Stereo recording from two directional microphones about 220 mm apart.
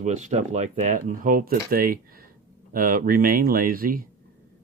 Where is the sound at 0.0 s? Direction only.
35° right (ahead or behind).